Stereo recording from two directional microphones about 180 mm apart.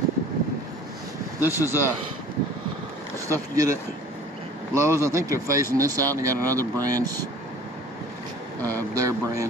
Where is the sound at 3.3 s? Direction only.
15° right (ahead or behind).